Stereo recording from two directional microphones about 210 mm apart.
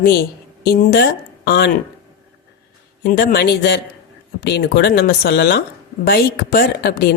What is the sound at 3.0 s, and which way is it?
Speech, 45° left (ahead or behind).